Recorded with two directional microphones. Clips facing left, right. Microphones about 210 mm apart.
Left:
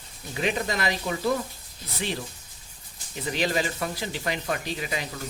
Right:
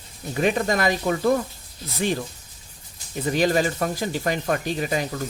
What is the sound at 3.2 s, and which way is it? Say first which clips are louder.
Speech: right 6 dB; 45° right (ahead or behind).